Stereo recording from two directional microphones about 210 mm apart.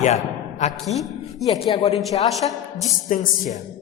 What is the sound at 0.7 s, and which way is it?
Speech, centre (ahead or behind).